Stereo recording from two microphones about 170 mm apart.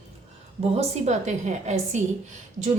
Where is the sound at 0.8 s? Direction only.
40° right (ahead or behind).